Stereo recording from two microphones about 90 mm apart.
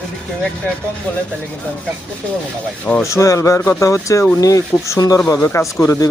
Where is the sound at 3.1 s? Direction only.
35° left (ahead or behind).